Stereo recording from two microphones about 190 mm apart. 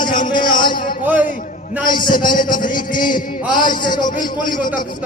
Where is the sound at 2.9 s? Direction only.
25° left (ahead or behind).